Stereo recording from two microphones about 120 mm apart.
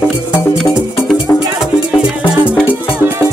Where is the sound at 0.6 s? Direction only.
Centre (ahead or behind).